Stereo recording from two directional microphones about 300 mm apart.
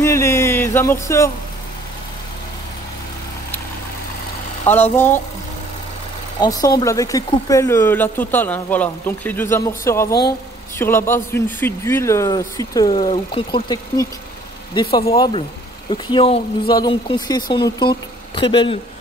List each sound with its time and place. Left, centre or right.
0.0 s a sound: centre
4.9 s speech: centre
6.4 s speech: centre